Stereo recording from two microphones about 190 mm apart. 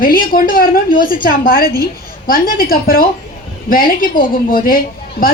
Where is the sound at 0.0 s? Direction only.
50° left (ahead or behind).